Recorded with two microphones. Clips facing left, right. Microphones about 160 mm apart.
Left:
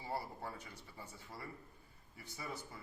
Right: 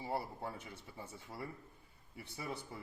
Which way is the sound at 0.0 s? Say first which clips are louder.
Right 3 dB; 25° right (ahead or behind).